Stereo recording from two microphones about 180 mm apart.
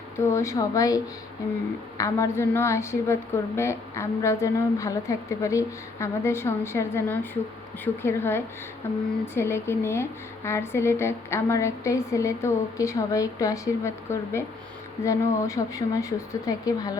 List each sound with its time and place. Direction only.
0.2 s a woman's voice: 15° left (ahead or behind)